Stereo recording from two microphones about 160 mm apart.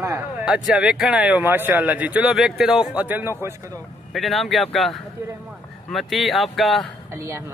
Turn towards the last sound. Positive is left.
turn(degrees=-20)  # may be behind; listen again after turning